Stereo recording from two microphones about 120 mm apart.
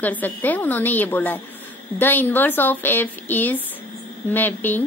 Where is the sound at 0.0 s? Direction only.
15° left (ahead or behind).